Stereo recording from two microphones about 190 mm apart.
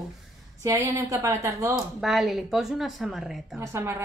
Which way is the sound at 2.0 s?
Centre (ahead or behind).